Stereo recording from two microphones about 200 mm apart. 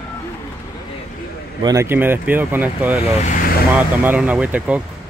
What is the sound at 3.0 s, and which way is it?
Speech, 35° left (ahead or behind).